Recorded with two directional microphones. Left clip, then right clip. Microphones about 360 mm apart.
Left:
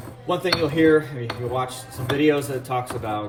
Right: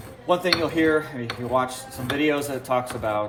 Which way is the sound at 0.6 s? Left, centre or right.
Centre.